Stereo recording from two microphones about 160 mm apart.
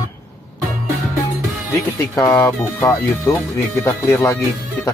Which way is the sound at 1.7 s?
20° left (ahead or behind).